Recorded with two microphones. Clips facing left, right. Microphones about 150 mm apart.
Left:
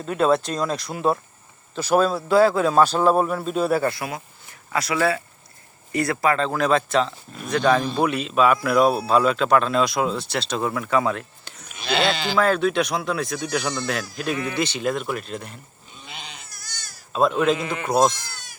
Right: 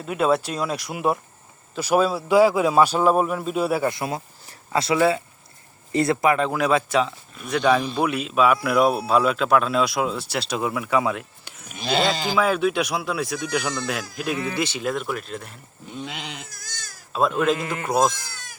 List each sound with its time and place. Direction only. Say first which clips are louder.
0.0 s speech: left 1 dB; 10° right (ahead or behind)
3.9 s speech: right 3 dB; 25° right (ahead or behind); by 11.6 s 10° right (ahead or behind)
11.7 s sheep: right 1 dB; 45° right (ahead or behind)
12.2 s speech: left 1 dB; 10° right (ahead or behind)
15.9 s goat: right 8 dB; 75° right (ahead or behind)
17.1 s speech: left 1 dB; centre (ahead or behind)